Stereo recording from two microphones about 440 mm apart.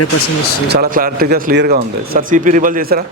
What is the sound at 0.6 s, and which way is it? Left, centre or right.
A man's voice, right.